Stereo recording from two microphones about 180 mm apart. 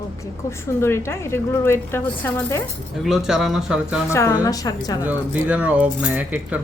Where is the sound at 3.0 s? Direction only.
Centre (ahead or behind).